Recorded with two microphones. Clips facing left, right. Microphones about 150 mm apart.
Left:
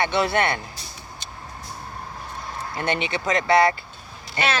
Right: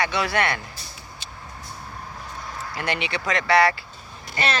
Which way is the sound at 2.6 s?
25° left (ahead or behind).